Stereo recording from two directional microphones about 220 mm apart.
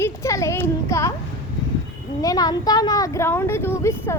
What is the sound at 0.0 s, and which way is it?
Speech, 15° left (ahead or behind).